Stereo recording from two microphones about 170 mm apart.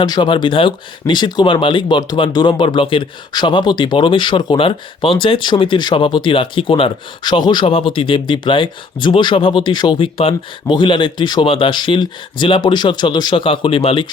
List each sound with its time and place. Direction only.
0.0 s speech: 25° left (ahead or behind)